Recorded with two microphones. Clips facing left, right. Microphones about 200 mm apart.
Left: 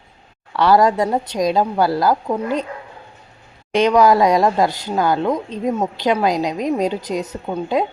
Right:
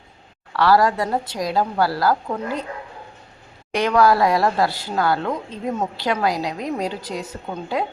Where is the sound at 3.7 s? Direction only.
20° left (ahead or behind).